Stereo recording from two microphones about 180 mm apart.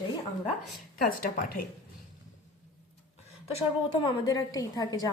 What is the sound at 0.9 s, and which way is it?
Speech, 55° left (ahead or behind).